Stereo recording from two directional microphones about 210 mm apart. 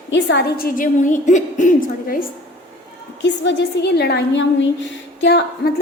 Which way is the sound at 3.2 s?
55° left (ahead or behind).